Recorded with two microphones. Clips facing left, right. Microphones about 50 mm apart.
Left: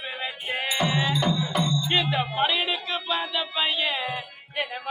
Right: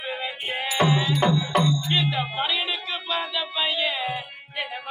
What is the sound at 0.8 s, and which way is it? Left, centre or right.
Music, right.